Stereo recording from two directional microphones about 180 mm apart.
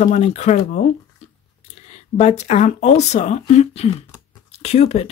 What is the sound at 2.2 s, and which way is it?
Speech, 40° left (ahead or behind).